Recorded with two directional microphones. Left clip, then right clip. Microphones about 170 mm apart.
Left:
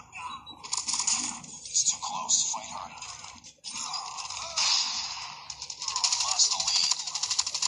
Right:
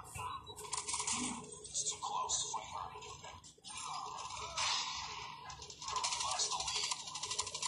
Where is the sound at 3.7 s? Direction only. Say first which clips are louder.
Left 8 dB; 50° left (ahead or behind).